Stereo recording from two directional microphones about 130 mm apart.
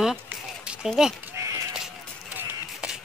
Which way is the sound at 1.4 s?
20° right (ahead or behind).